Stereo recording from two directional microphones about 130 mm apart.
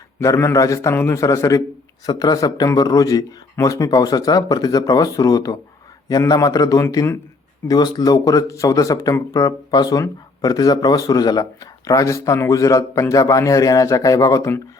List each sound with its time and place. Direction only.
0.2 s speech: 20° left (ahead or behind)